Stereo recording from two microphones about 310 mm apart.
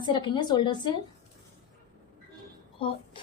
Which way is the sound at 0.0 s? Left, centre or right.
Centre.